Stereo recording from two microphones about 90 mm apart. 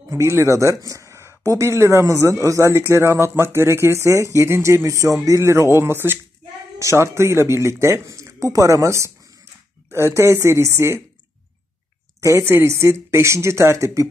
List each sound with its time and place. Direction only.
0.1 s speech: 30° right (ahead or behind)
12.2 s speech: 35° right (ahead or behind)